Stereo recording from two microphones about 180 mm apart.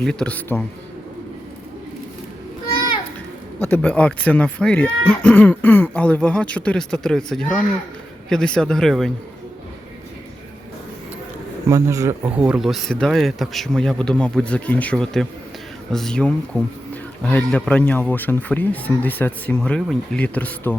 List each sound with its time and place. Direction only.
0.0 s speech: 5° left (ahead or behind)
3.6 s speech: 10° left (ahead or behind)
11.7 s speech: 15° right (ahead or behind)
12.4 s speech: 5° right (ahead or behind)